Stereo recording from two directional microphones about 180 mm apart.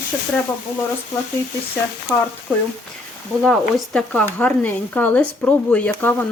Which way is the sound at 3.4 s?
5° left (ahead or behind).